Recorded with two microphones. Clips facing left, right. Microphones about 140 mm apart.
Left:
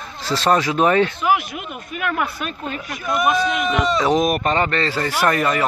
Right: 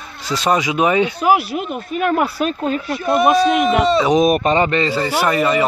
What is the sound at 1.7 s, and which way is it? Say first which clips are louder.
Speech: right 6 dB; 40° right (ahead or behind).